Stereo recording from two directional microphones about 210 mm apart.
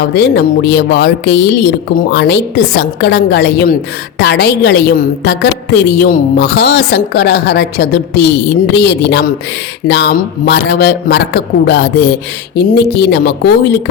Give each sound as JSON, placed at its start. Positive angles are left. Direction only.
{"t": 0.1, "sound": "a woman's voice", "side_deg": 50}